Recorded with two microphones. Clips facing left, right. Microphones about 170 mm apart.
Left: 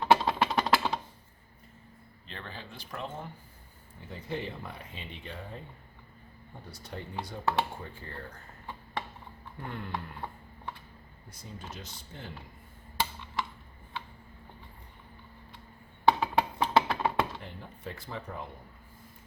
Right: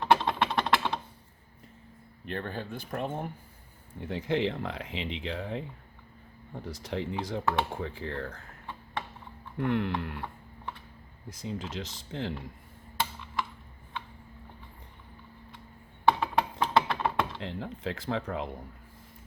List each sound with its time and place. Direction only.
0.0 s typing: 5° left (ahead or behind)
2.2 s speech: 55° right (ahead or behind)
4.0 s speech: 90° right
9.6 s speech: 75° right (ahead or behind)
11.3 s speech: 90° right
16.2 s a sound: centre (ahead or behind)
17.4 s speech: 90° right